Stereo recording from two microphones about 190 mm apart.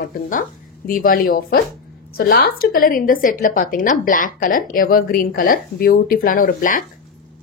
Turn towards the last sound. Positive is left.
turn(degrees=45)  # may be behind; listen again after turning